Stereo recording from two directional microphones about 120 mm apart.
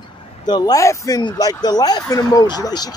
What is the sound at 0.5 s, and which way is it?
Speech, 35° left (ahead or behind).